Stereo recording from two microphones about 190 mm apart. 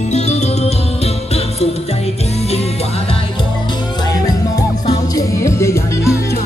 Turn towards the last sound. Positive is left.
turn(degrees=15)  # may be behind; listen again after turning